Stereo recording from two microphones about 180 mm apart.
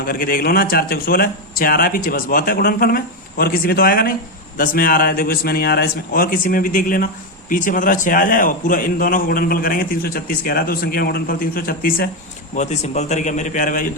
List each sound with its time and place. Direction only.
0.0 s a man's voice: 50° left (ahead or behind)
12.5 s a man's voice: 40° left (ahead or behind)